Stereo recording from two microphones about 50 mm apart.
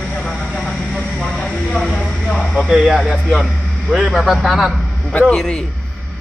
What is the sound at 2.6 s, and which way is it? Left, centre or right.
Speech, centre.